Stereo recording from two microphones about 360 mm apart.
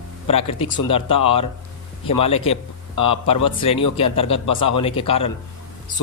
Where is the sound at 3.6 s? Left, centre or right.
Centre.